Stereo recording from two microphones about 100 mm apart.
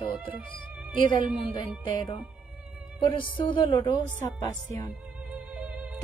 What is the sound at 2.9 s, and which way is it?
Speech, 55° left (ahead or behind).